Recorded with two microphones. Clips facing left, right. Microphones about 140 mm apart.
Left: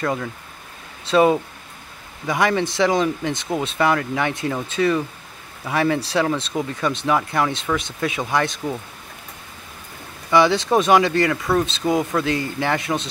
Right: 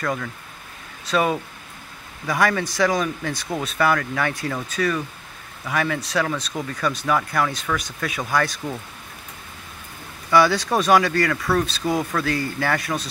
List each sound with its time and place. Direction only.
0.0 s speech: 25° left (ahead or behind)
10.3 s speech: 20° left (ahead or behind)